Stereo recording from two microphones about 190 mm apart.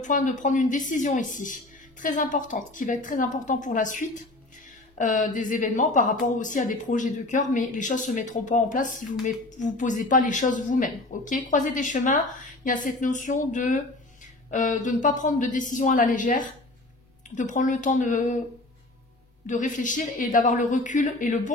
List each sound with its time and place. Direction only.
0.0 s a woman's voice: 40° left (ahead or behind)
19.4 s speech: 40° left (ahead or behind)